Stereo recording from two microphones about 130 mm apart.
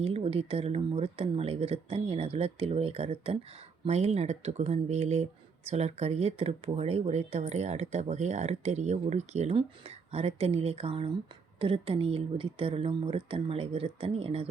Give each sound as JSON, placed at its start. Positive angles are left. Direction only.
{"t": 0.0, "sound": "speech", "side_deg": -45}